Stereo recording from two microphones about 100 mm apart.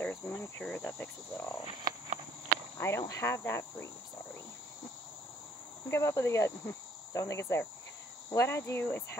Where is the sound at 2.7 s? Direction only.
30° left (ahead or behind).